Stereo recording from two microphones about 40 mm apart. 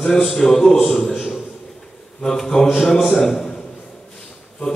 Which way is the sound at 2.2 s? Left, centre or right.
Centre.